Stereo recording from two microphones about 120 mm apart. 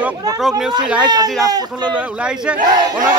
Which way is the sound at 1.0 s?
35° right (ahead or behind).